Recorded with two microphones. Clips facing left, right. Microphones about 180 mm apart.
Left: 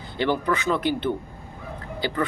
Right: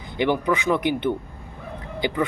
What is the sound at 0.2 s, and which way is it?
Speech, 15° right (ahead or behind).